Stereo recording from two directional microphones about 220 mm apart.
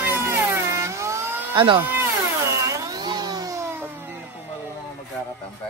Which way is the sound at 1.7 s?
10° right (ahead or behind).